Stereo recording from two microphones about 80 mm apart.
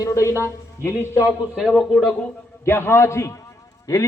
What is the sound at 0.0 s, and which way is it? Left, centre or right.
A man's voice, left.